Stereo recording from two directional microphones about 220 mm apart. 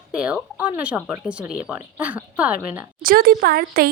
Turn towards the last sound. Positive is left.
turn(degrees=-45)  # may be behind; listen again after turning